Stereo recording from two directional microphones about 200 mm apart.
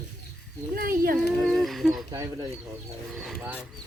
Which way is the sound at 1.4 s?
Centre (ahead or behind).